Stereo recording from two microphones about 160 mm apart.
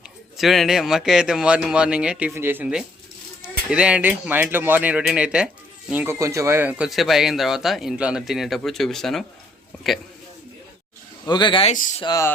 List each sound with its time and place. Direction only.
0.3 s speech: centre (ahead or behind)
11.3 s speech: 30° left (ahead or behind)